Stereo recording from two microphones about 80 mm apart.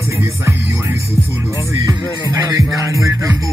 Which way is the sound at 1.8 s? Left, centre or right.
Right.